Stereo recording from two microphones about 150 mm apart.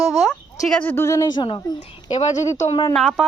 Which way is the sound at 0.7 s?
10° left (ahead or behind).